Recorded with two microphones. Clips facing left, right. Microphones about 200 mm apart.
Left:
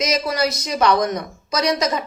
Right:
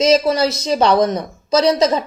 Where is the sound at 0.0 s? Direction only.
30° right (ahead or behind).